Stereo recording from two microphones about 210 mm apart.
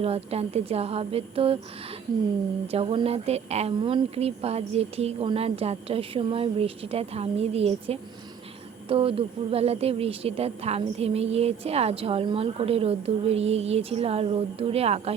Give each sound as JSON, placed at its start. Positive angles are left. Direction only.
{"t": 0.0, "sound": "a woman's voice", "side_deg": -30}
{"t": 2.7, "sound": "a woman's voice", "side_deg": -25}